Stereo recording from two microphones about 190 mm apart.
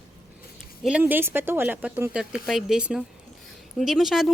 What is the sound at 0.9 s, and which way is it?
A woman's voice, 10° right (ahead or behind).